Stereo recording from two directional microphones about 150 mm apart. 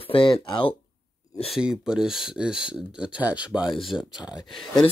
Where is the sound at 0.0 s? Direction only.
35° left (ahead or behind).